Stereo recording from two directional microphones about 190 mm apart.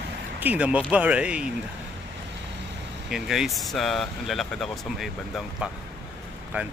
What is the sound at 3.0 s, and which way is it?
Speech, centre (ahead or behind).